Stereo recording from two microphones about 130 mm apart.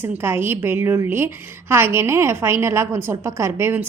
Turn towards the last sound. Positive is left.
turn(degrees=-20)  # may be behind; listen again after turning